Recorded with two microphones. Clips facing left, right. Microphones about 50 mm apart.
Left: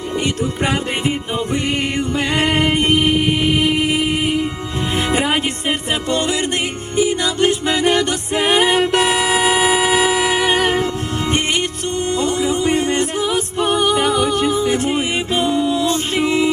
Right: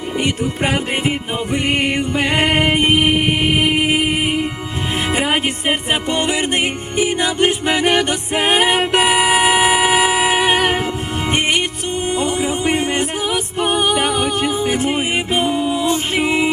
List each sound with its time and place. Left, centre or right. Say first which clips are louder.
0.6 s music: right 1 dB; centre
5.0 s music: right 1 dB; centre
5.6 s music: right 1 dB; right
12.0 s music: left 1 dB; centre